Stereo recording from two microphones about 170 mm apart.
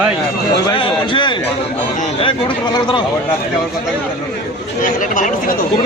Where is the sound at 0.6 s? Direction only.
30° left (ahead or behind).